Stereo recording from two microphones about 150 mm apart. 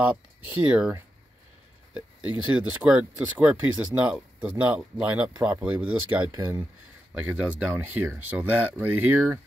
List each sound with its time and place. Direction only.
2.0 s speech: 10° right (ahead or behind)